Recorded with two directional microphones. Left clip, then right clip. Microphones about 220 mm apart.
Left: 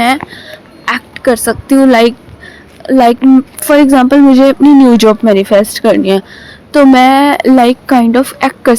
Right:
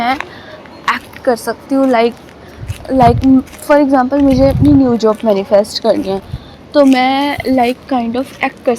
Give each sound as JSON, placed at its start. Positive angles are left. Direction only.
{"t": 0.9, "sound": "speech", "side_deg": 40}